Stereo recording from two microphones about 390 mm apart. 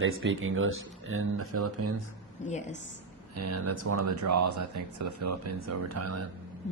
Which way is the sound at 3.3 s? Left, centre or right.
Right.